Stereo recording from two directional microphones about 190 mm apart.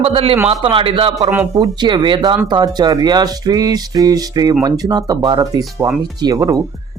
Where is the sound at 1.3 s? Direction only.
10° right (ahead or behind).